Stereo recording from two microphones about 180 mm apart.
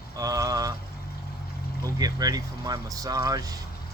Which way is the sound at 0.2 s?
20° right (ahead or behind).